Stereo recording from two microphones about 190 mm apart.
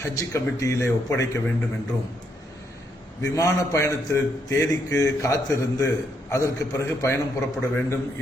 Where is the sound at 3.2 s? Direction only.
15° left (ahead or behind).